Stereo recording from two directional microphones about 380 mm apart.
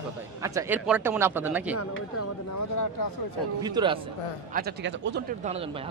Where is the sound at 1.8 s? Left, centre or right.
Left.